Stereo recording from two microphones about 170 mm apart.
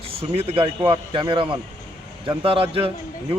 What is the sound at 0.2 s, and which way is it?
A man's voice, 35° right (ahead or behind).